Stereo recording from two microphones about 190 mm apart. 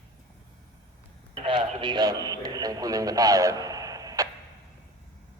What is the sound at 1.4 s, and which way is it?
A man's voice, 25° right (ahead or behind).